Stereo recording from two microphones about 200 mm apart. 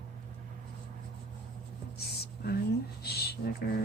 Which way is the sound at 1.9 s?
50° left (ahead or behind).